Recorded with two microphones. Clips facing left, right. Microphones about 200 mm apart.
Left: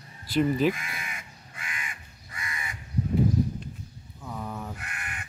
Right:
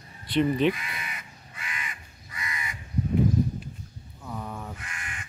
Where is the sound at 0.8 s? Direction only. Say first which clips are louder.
Right 1 dB; 50° left (ahead or behind).